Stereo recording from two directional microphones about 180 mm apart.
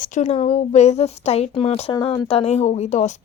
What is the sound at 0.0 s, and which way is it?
Speech, 40° left (ahead or behind).